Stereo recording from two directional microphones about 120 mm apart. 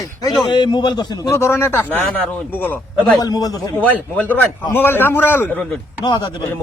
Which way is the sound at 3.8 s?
10° left (ahead or behind).